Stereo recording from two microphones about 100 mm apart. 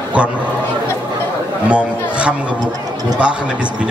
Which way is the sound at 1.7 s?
10° right (ahead or behind).